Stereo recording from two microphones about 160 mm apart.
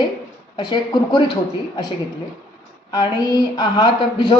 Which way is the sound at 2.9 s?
25° left (ahead or behind).